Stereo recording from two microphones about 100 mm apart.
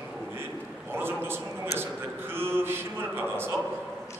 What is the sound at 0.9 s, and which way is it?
A man's voice, 25° right (ahead or behind).